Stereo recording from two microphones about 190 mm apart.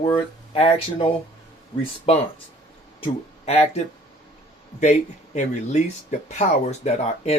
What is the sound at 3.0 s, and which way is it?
Speech, 35° left (ahead or behind).